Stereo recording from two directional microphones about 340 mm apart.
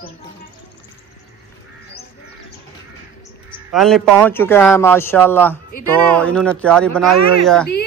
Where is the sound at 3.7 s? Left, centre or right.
Centre.